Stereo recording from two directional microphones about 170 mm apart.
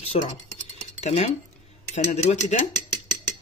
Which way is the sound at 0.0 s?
35° left (ahead or behind).